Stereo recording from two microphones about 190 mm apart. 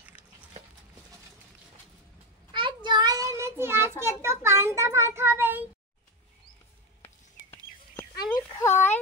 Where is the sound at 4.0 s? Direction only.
15° right (ahead or behind).